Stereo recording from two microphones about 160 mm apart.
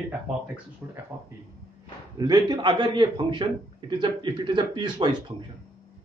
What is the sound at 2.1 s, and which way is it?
A man's voice, 25° right (ahead or behind).